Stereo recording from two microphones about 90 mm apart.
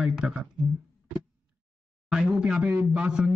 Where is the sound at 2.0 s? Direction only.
5° right (ahead or behind).